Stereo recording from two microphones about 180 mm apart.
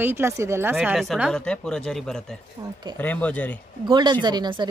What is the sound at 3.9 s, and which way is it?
Speech, 25° right (ahead or behind).